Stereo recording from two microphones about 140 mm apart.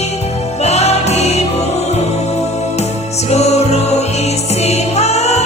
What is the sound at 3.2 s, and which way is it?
Music, 50° left (ahead or behind).